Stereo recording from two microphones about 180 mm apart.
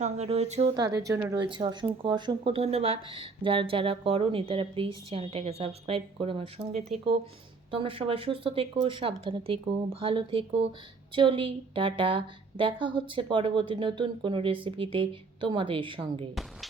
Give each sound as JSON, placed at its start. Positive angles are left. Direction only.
{"t": 0.0, "sound": "speech", "side_deg": -35}
{"t": 0.7, "sound": "speech", "side_deg": -20}
{"t": 16.3, "sound": "a woman's voice", "side_deg": 0}